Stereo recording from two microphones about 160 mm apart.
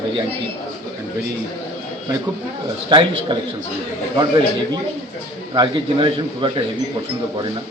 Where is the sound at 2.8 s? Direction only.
30° right (ahead or behind).